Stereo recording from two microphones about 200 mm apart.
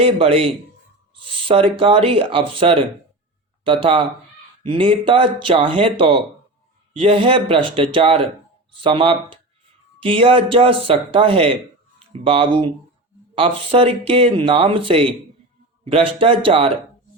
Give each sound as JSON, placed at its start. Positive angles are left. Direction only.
{"t": 0.0, "sound": "speech", "side_deg": -30}